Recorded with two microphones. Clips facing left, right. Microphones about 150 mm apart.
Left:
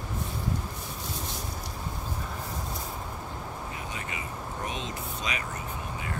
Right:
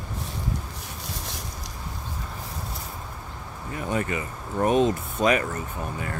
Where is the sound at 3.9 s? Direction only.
50° right (ahead or behind).